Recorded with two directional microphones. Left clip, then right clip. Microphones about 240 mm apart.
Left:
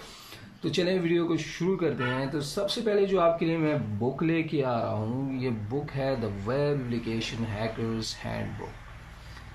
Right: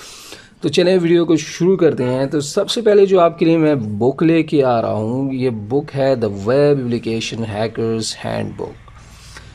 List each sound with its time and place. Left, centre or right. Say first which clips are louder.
0.6 s speech: right 13 dB; right